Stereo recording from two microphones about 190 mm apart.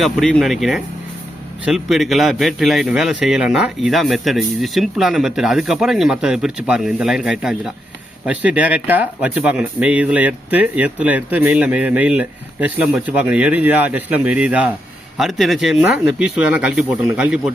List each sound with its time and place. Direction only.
0.0 s a man's voice: centre (ahead or behind)